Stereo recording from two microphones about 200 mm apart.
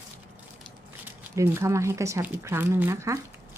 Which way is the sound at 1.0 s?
10° right (ahead or behind).